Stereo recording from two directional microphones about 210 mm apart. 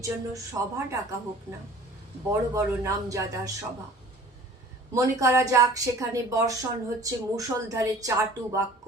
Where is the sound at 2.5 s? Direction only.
15° right (ahead or behind).